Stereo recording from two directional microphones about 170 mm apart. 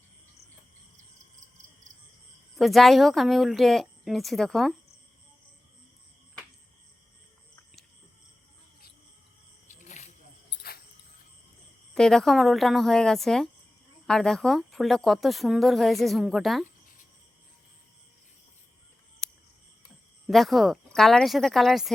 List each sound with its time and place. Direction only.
2.6 s speech: centre (ahead or behind)
9.6 s snake: 45° left (ahead or behind)
11.9 s speech: 5° left (ahead or behind)
20.2 s speech: centre (ahead or behind)